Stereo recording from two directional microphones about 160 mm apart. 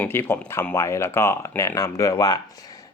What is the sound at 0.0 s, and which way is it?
Speech, 15° left (ahead or behind).